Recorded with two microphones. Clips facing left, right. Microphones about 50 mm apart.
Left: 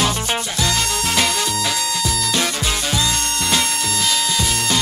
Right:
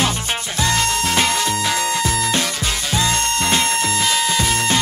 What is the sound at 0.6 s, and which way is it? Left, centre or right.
Music, right.